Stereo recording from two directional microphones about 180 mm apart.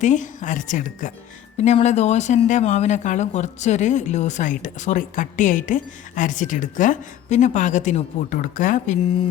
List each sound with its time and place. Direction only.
0.0 s speech: 45° left (ahead or behind)